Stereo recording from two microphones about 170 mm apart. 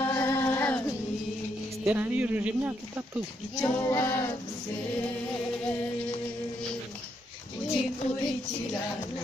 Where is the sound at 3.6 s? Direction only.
15° left (ahead or behind).